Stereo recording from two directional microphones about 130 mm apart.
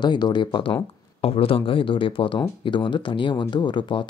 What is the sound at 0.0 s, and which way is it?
Speech, 35° left (ahead or behind).